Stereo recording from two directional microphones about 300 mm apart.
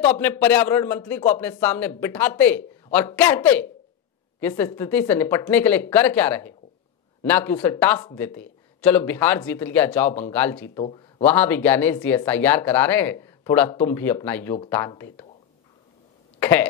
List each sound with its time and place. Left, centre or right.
0.0 s speech: centre
10.8 s speech: centre
11.2 s speech: centre
16.3 s speech: centre